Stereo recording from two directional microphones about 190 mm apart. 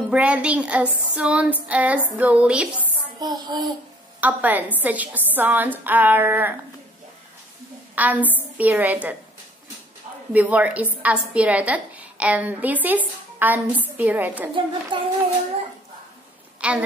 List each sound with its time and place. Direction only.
0.1 s a woman's voice: 5° right (ahead or behind)
3.2 s a woman's voice: 20° right (ahead or behind)
4.2 s a woman's voice: 10° right (ahead or behind)
7.9 s a woman's voice: 10° right (ahead or behind)
10.3 s a woman's voice: 10° right (ahead or behind)
14.5 s a woman's voice: 25° right (ahead or behind)
16.6 s a woman's voice: 5° right (ahead or behind)